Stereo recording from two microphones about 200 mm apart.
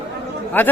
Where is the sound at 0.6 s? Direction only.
10° left (ahead or behind).